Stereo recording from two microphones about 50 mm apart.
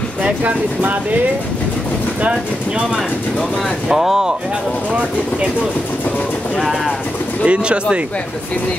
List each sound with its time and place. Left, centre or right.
0.4 s speech: right
3.9 s speech: centre
7.4 s speech: right